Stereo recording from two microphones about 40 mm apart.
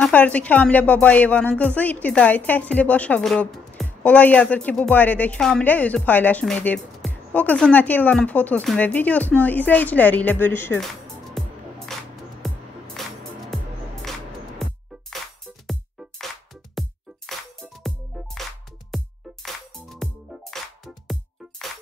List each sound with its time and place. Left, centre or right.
0.1 s a woman's voice: left
8.1 s a woman's voice: left
11.3 s music: centre
17.3 s music: centre